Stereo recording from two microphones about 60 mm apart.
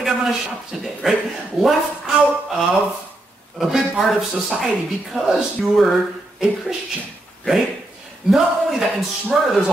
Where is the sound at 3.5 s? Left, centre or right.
Centre.